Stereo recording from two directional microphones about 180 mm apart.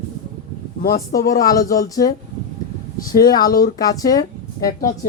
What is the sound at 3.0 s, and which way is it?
Speech, 55° left (ahead or behind).